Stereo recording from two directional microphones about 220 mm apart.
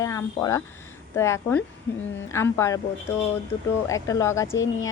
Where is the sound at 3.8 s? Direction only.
15° left (ahead or behind).